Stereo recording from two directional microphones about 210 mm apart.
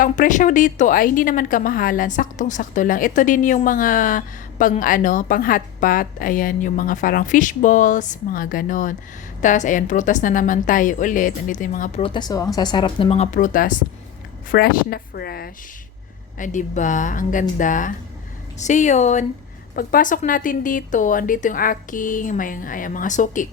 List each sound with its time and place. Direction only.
0.0 s a woman's voice: 40° left (ahead or behind)
12.0 s speech: 20° left (ahead or behind); by 15.4 s 45° left (ahead or behind)
16.4 s a woman's voice: 35° left (ahead or behind)